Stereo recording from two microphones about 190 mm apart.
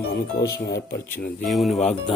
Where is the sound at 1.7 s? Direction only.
35° left (ahead or behind).